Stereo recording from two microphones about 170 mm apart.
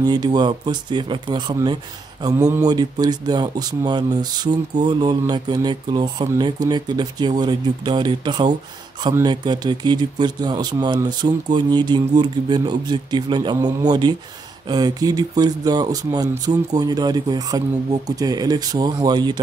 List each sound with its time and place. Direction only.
0.0 s speech: 25° right (ahead or behind)